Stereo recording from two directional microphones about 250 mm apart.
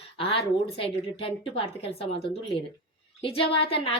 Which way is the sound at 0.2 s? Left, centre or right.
Left.